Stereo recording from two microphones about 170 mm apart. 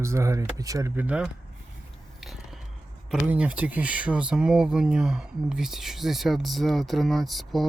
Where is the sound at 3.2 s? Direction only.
10° right (ahead or behind).